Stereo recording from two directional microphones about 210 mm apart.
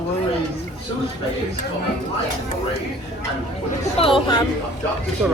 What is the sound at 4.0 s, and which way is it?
Speech, 25° left (ahead or behind).